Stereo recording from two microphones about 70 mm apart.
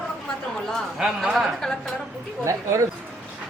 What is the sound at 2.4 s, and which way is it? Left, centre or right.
Speech, right.